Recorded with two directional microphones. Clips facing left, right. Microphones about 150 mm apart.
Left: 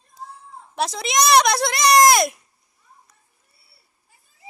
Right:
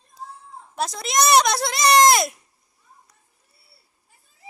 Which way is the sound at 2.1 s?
Centre (ahead or behind).